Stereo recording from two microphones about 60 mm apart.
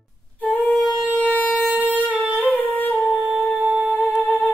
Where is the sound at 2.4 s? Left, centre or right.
Left.